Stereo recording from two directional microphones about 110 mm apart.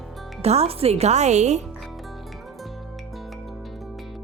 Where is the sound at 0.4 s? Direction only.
70° right (ahead or behind); by 1.6 s 90° right.